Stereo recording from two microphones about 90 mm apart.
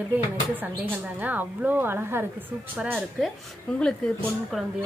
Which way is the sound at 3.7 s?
10° left (ahead or behind).